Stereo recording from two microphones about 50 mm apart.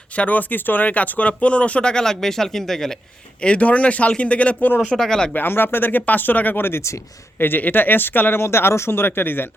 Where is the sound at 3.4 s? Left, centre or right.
Left.